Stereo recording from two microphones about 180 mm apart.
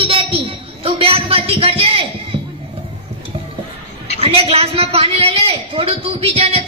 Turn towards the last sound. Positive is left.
turn(degrees=-35)  # may be behind; listen again after turning